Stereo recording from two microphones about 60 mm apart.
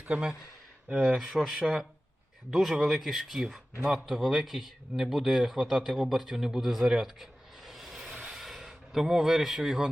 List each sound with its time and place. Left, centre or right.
0.0 s a man's voice: centre